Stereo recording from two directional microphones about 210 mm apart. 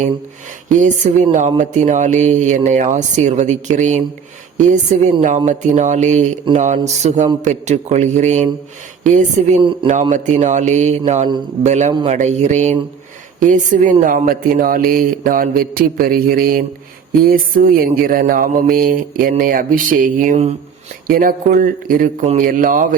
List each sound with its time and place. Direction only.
0.7 s speech: 35° right (ahead or behind)